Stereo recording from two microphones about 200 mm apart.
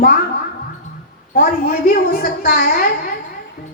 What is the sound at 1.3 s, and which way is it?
A woman's voice, 45° left (ahead or behind).